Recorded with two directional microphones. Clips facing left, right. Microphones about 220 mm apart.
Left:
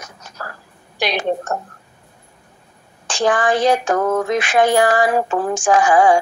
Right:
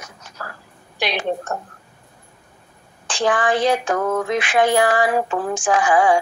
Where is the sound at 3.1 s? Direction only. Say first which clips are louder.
Left 2 dB; 45° left (ahead or behind).